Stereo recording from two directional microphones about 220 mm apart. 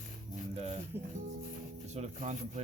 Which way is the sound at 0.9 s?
10° right (ahead or behind).